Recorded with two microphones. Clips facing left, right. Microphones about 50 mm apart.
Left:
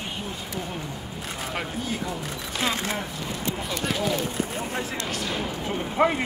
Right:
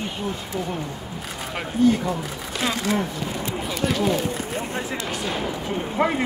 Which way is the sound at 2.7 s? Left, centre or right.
Left.